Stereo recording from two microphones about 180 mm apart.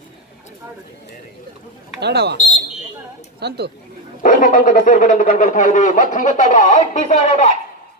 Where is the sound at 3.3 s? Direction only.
65° right (ahead or behind).